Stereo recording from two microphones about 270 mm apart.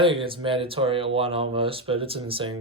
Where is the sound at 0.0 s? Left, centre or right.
Centre.